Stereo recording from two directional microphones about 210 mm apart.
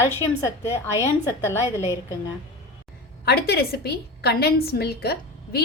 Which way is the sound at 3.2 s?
50° left (ahead or behind).